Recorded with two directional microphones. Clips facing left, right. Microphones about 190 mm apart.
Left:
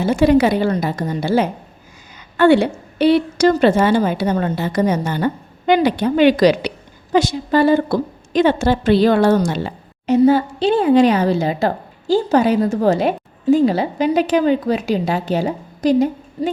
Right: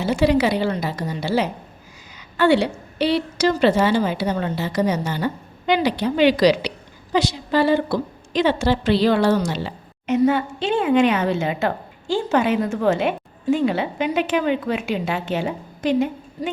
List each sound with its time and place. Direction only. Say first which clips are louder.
0.0 s a woman's voice: left 5 dB; 50° left (ahead or behind)
10.1 s a woman's voice: left 5 dB; 35° left (ahead or behind)